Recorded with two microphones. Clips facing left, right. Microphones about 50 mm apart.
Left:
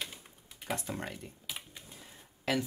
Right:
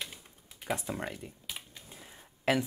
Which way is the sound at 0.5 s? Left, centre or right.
Centre.